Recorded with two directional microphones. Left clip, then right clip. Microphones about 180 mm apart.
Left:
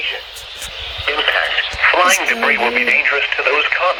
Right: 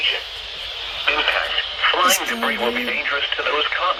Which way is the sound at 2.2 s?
20° left (ahead or behind).